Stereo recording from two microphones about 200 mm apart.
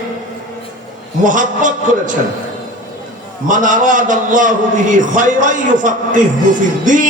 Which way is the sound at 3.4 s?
40° right (ahead or behind).